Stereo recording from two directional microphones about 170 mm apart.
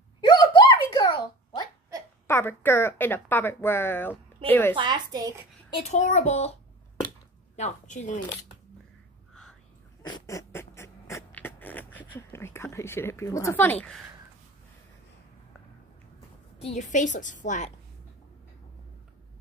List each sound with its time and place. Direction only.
0.2 s a sound: 30° left (ahead or behind)
2.2 s speech: 15° left (ahead or behind)
4.7 s a woman's voice: 25° right (ahead or behind)
5.8 s a child's voice: 40° left (ahead or behind)
7.5 s a woman's voice: 45° left (ahead or behind)
9.3 s whispering: 5° left (ahead or behind)
10.0 s a sound: 20° left (ahead or behind)
12.2 s speech: 15° left (ahead or behind)
16.5 s a sound: 35° left (ahead or behind)
16.9 s a woman's voice: 45° left (ahead or behind)